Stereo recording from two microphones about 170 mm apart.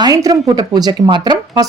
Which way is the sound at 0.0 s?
20° right (ahead or behind).